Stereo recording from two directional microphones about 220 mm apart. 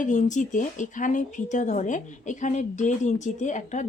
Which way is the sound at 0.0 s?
35° left (ahead or behind).